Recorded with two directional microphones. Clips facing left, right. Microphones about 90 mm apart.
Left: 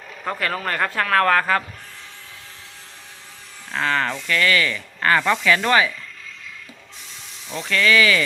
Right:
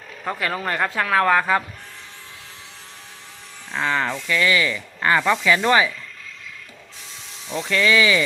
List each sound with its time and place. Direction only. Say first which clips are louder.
0.3 s speech: even; 10° right (ahead or behind)
3.8 s speech: even; 15° right (ahead or behind)
7.7 s speech: even; 25° right (ahead or behind)